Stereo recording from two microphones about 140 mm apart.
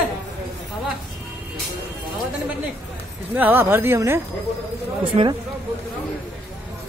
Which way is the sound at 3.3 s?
15° right (ahead or behind).